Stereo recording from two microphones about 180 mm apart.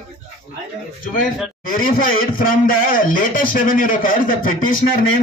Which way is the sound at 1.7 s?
50° left (ahead or behind).